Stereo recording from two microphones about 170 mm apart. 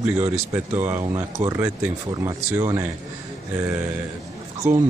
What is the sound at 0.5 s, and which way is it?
Speech, 10° right (ahead or behind).